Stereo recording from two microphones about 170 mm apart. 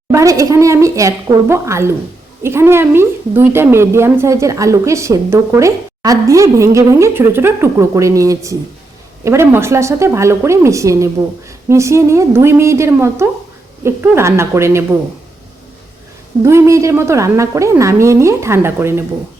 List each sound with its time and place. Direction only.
0.1 s a woman's voice: 20° right (ahead or behind)
16.4 s a woman's voice: 15° right (ahead or behind)